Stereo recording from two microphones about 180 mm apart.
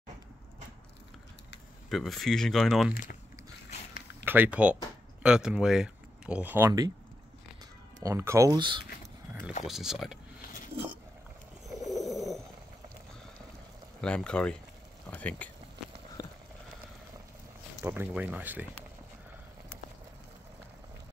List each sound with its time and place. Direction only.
1.9 s speech: centre (ahead or behind)
4.2 s speech: 10° right (ahead or behind)
8.0 s speech: 15° right (ahead or behind)
9.7 s speech: centre (ahead or behind)
11.6 s bird: centre (ahead or behind)
14.0 s speech: 5° left (ahead or behind)
16.2 s a sound: 20° left (ahead or behind)
17.8 s speech: 10° right (ahead or behind)